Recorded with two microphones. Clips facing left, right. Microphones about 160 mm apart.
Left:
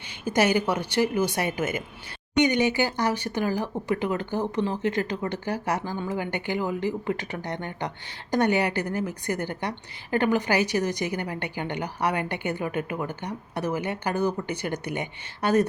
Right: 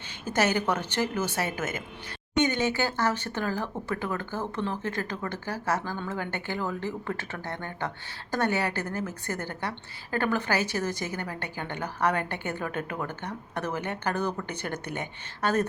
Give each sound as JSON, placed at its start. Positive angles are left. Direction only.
{"t": 0.3, "sound": "a woman's voice", "side_deg": 10}